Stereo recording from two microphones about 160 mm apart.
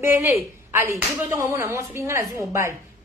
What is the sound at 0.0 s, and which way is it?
A woman's voice, 15° right (ahead or behind).